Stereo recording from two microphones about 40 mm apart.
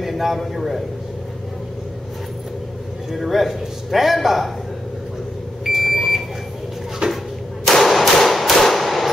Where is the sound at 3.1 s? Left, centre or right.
Centre.